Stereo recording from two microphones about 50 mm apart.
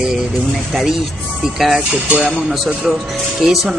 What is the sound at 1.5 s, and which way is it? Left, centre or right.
Speech, centre.